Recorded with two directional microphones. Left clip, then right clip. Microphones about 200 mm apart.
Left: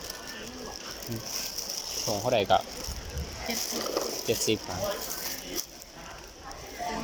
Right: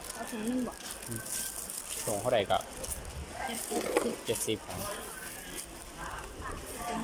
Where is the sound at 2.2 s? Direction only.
10° left (ahead or behind).